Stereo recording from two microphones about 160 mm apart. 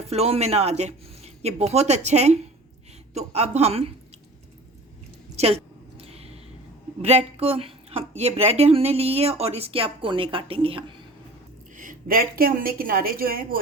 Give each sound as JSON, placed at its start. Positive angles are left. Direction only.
{"t": 0.1, "sound": "speech", "side_deg": -40}
{"t": 5.4, "sound": "speech", "side_deg": -40}
{"t": 6.0, "sound": "a sound", "side_deg": -40}
{"t": 7.0, "sound": "speech", "side_deg": -40}
{"t": 11.8, "sound": "a woman's voice", "side_deg": -60}